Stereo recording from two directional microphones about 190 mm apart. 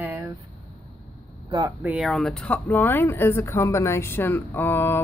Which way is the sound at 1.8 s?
5° right (ahead or behind).